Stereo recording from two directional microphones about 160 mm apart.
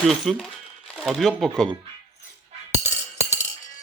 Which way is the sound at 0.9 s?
Centre (ahead or behind).